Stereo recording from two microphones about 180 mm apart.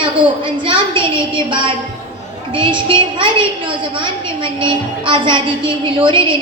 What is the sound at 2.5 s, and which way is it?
A woman's voice, 25° right (ahead or behind).